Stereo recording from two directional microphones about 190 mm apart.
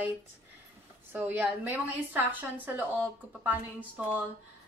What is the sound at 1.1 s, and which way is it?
A woman's voice, 10° right (ahead or behind).